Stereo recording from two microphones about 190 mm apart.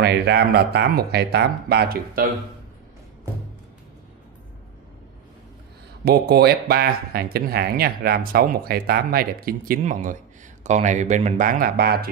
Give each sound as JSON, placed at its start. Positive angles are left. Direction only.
{"t": 0.0, "sound": "speech", "side_deg": -60}
{"t": 6.0, "sound": "speech", "side_deg": -55}